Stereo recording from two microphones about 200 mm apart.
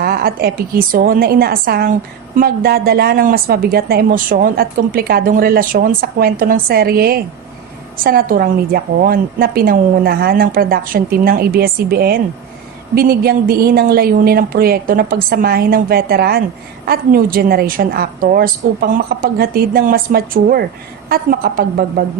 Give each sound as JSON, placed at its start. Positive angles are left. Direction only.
{"t": 0.0, "sound": "a woman's voice", "side_deg": -50}